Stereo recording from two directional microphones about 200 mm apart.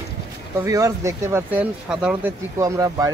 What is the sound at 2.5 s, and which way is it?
Speech, 15° right (ahead or behind).